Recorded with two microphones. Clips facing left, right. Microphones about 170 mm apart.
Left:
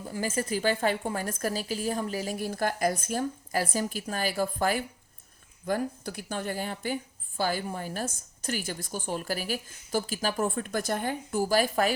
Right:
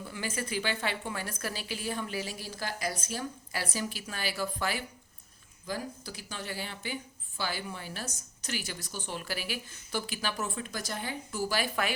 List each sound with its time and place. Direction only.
0.0 s a woman's voice: 40° left (ahead or behind)